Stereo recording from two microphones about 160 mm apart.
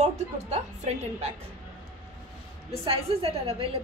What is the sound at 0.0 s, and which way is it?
Speech, 45° right (ahead or behind).